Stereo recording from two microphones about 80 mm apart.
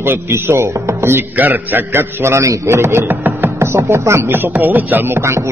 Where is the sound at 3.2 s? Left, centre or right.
Right.